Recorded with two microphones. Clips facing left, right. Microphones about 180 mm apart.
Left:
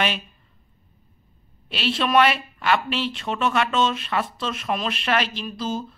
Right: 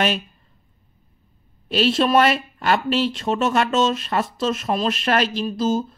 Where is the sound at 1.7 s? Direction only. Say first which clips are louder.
Right 5 dB; 40° right (ahead or behind).